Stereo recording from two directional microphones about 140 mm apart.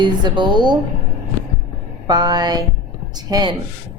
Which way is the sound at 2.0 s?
30° right (ahead or behind).